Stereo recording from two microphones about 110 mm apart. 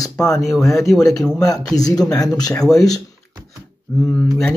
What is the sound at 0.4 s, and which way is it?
Speech, 5° left (ahead or behind).